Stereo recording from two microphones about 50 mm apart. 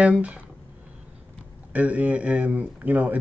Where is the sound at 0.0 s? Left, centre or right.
Right.